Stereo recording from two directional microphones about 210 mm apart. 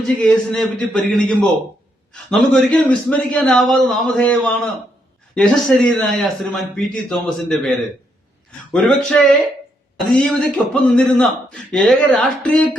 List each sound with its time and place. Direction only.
0.2 s a man's voice: 5° left (ahead or behind)
8.7 s a man's voice: 5° left (ahead or behind)